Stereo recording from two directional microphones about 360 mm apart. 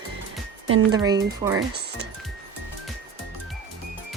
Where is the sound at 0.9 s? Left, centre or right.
Centre.